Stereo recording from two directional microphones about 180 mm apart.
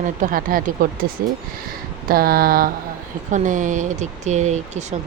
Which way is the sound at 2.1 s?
55° right (ahead or behind).